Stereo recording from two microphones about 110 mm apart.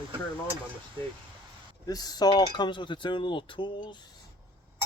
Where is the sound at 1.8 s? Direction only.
35° left (ahead or behind).